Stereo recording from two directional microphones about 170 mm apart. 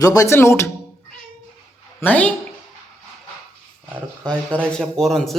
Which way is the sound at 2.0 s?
10° left (ahead or behind).